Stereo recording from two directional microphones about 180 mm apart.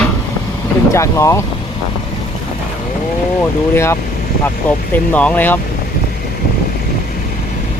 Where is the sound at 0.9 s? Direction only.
15° left (ahead or behind).